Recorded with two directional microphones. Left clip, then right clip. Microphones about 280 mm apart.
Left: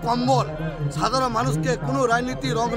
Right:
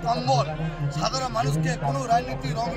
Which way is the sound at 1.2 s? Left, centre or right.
Left.